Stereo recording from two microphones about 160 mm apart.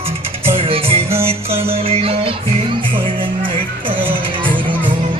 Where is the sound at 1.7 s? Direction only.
40° right (ahead or behind).